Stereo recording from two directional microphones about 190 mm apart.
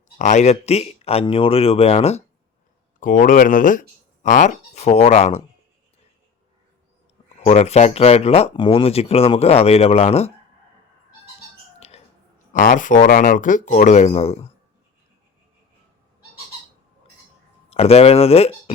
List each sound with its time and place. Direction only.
0.2 s speech: 40° left (ahead or behind)
3.0 s speech: 45° left (ahead or behind)
7.4 s speech: 35° left (ahead or behind)
11.8 s a sound: 35° left (ahead or behind)
12.5 s speech: 45° left (ahead or behind)
17.7 s speech: 30° left (ahead or behind)